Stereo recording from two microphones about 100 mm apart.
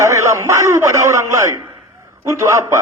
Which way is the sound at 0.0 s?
30° right (ahead or behind).